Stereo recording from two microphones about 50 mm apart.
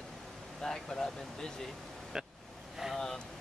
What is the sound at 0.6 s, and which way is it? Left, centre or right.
Speech, centre.